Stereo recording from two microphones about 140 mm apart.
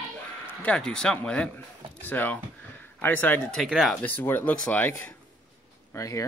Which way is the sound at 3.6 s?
5° right (ahead or behind).